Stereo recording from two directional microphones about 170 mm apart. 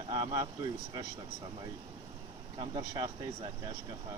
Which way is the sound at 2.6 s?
25° right (ahead or behind).